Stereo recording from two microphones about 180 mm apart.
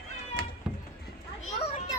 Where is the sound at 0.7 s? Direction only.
5° right (ahead or behind).